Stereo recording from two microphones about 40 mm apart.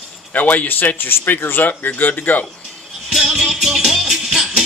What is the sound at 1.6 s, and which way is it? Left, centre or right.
Speech, left.